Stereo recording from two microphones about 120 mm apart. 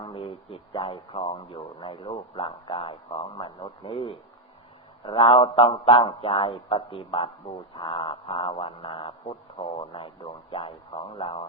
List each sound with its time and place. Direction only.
0.0 s speech: 45° left (ahead or behind)